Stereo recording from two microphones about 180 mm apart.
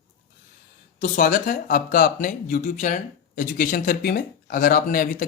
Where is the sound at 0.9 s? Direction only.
45° left (ahead or behind).